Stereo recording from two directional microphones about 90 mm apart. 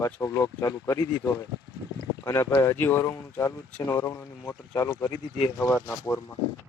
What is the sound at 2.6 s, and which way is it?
Speech, 25° left (ahead or behind).